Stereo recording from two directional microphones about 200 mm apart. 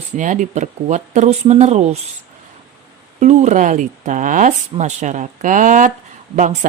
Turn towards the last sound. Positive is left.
turn(degrees=-40)  # may be behind; listen again after turning